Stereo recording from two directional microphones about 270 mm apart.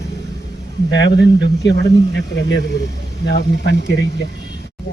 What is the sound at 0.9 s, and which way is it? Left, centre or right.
Speech, left.